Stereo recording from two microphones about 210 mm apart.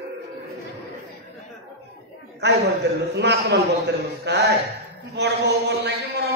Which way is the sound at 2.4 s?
55° right (ahead or behind).